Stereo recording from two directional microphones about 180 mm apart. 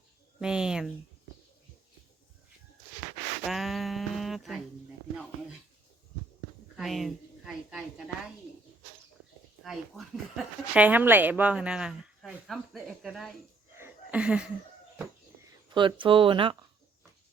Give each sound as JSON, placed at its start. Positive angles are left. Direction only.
{"t": 0.3, "sound": "speech", "side_deg": -5}
{"t": 3.4, "sound": "a sound", "side_deg": 0}
{"t": 6.7, "sound": "a woman's voice", "side_deg": 0}
{"t": 9.6, "sound": "speech", "side_deg": 0}
{"t": 13.7, "sound": "a sound", "side_deg": -10}
{"t": 15.7, "sound": "speech", "side_deg": -25}